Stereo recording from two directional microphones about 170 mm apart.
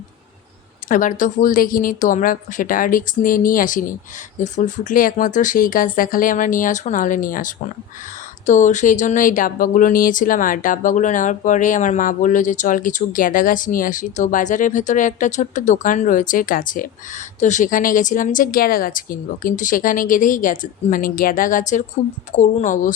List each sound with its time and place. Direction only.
0.9 s speech: 50° left (ahead or behind)